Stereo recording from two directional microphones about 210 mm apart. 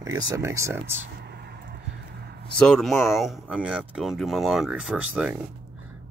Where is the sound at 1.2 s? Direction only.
50° right (ahead or behind).